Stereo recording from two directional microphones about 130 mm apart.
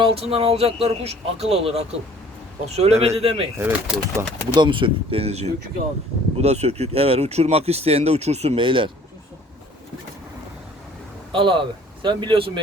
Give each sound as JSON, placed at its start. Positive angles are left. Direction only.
{"t": 0.0, "sound": "speech", "side_deg": -50}
{"t": 3.6, "sound": "speech", "side_deg": -10}
{"t": 4.5, "sound": "speech", "side_deg": -40}
{"t": 11.3, "sound": "speech", "side_deg": -40}